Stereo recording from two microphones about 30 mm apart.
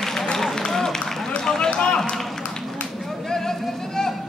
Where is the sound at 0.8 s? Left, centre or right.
Centre.